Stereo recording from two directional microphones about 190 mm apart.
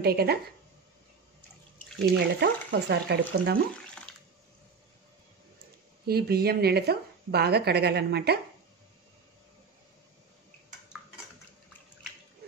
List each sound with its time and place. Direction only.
0.0 s speech: 55° right (ahead or behind)
2.1 s speech: 60° right (ahead or behind)
3.7 s a sound: 5° left (ahead or behind)
6.0 s speech: 55° right (ahead or behind)